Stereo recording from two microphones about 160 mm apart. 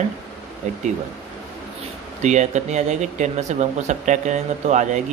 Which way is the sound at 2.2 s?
45° right (ahead or behind).